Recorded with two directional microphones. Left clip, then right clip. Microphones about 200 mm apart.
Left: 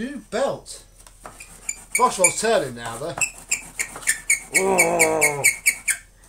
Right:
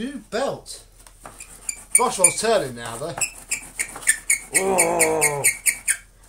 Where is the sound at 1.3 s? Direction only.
Centre (ahead or behind).